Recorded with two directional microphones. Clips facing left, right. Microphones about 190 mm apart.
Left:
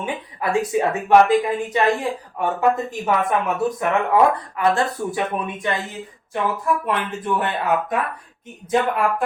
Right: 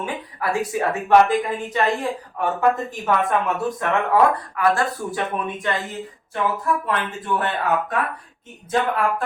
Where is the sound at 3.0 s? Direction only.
20° left (ahead or behind).